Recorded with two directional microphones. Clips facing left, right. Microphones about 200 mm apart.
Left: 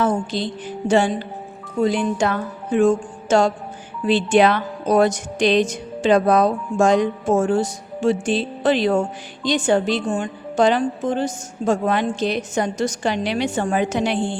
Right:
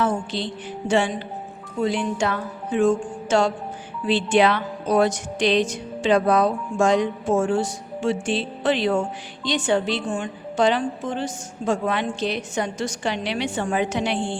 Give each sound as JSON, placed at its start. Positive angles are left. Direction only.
{"t": 0.0, "sound": "music", "side_deg": 40}
{"t": 1.8, "sound": "speech", "side_deg": 40}